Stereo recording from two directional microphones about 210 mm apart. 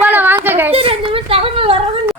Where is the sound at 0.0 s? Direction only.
10° right (ahead or behind).